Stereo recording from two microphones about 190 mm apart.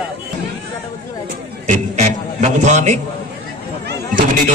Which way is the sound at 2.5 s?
40° right (ahead or behind).